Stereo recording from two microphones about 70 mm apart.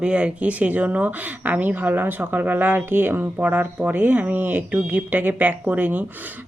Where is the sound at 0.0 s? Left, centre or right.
Centre.